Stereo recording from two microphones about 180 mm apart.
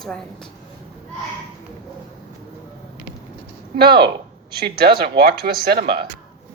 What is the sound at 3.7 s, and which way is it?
Speech, 60° right (ahead or behind).